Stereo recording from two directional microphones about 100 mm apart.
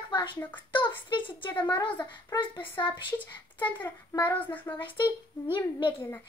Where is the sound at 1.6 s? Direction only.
50° left (ahead or behind).